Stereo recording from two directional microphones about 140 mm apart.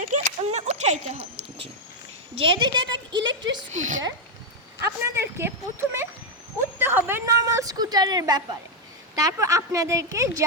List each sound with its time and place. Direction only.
0.0 s a sound: 55° right (ahead or behind)
2.3 s a woman's voice: 40° right (ahead or behind)
3.7 s speech: 60° right (ahead or behind)
4.8 s a woman's voice: 15° right (ahead or behind)